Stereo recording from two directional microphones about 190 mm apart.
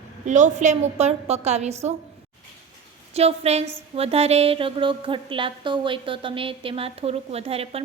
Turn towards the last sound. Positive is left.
turn(degrees=-30)  # may be behind; listen again after turning